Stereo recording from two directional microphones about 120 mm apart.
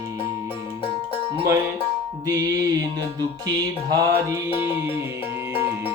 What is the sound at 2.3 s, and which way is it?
Music, 30° right (ahead or behind).